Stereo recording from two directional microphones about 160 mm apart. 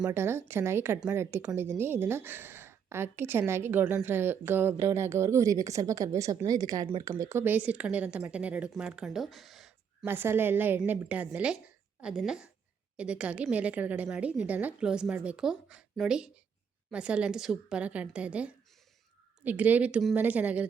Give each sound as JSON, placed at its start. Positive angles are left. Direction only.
{"t": 0.0, "sound": "a woman's voice", "side_deg": -15}
{"t": 10.1, "sound": "a woman's voice", "side_deg": -15}